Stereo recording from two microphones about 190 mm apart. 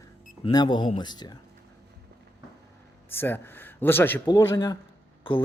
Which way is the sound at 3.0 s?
10° left (ahead or behind).